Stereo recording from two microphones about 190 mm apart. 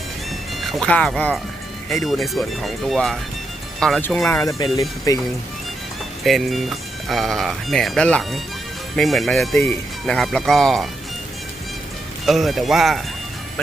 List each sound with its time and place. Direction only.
0.6 s speech: centre (ahead or behind)
4.4 s speech: 20° left (ahead or behind)
6.2 s speech: centre (ahead or behind)
12.2 s speech: centre (ahead or behind)